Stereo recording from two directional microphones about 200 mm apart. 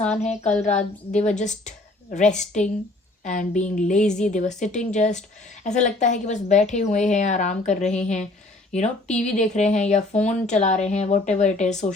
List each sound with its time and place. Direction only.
0.6 s a woman's voice: 35° left (ahead or behind)